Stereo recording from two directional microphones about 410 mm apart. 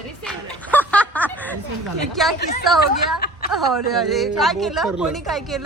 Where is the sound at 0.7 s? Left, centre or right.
Centre.